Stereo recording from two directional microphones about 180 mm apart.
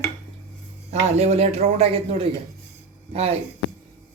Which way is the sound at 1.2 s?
35° right (ahead or behind).